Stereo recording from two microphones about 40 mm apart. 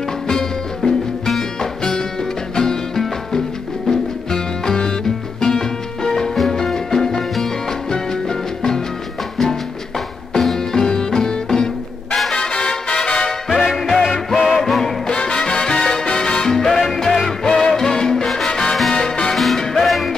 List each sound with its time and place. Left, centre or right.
0.3 s music: centre
13.7 s music: centre
15.0 s music: left
16.1 s salsa music: left
16.5 s music: centre
18.5 s salsa music: centre
18.9 s music: centre
19.3 s salsa music: centre
19.6 s music: centre